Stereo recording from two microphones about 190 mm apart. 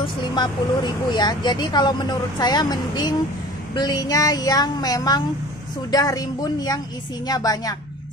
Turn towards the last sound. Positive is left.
turn(degrees=20)  # may be behind; listen again after turning